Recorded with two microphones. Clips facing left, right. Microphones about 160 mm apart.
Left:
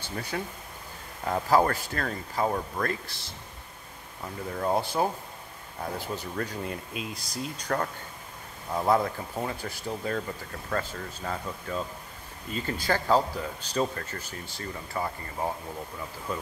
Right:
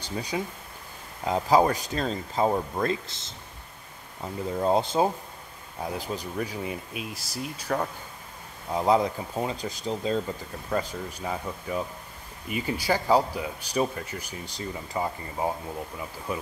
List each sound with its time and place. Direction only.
0.0 s speech: 15° right (ahead or behind)
8.7 s speech: 15° right (ahead or behind)